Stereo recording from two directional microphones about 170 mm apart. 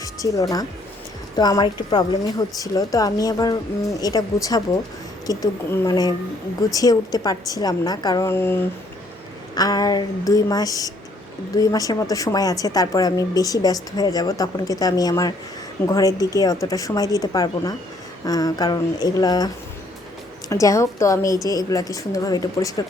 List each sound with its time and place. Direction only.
0.0 s music: 20° left (ahead or behind)
1.4 s speech: 25° left (ahead or behind)
20.5 s a woman's voice: 20° left (ahead or behind)